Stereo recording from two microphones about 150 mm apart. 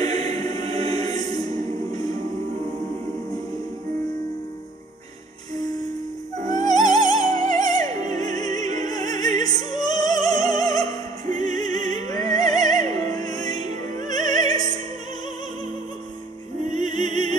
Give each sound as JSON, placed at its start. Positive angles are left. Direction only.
{"t": 0.2, "sound": "music", "side_deg": 25}
{"t": 5.6, "sound": "music", "side_deg": 25}
{"t": 9.4, "sound": "opera", "side_deg": 25}
{"t": 12.5, "sound": "music", "side_deg": 25}
{"t": 16.8, "sound": "opera", "side_deg": 30}